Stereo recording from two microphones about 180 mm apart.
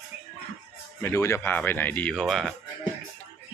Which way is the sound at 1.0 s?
15° left (ahead or behind).